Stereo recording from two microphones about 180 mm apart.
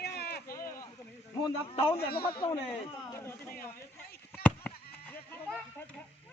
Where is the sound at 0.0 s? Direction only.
65° left (ahead or behind).